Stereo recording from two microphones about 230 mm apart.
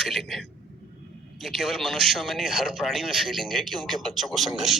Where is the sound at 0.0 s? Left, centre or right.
Centre.